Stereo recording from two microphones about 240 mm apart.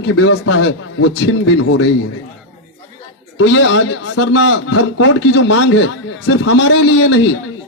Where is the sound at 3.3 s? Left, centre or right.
Left.